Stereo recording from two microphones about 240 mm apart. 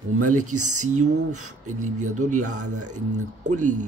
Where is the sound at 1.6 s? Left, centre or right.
Right.